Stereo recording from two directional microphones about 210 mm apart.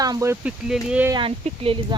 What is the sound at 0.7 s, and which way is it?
Speech, 5° right (ahead or behind).